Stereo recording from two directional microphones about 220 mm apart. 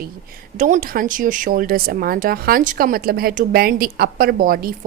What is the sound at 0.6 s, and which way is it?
Speech, 35° right (ahead or behind).